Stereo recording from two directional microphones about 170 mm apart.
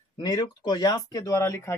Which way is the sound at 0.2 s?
20° left (ahead or behind).